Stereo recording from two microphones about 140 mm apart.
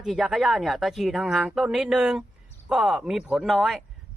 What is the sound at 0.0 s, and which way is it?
Speech, 5° right (ahead or behind).